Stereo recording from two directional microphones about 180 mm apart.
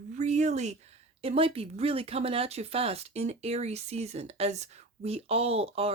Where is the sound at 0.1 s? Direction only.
40° right (ahead or behind).